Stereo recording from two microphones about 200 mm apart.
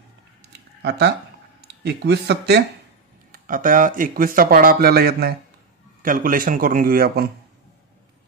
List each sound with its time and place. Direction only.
0.4 s a sound: 55° right (ahead or behind)
1.6 s speech: 55° right (ahead or behind)
3.3 s speech: 45° right (ahead or behind)